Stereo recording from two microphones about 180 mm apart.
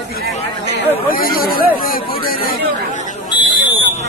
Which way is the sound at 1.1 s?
55° left (ahead or behind).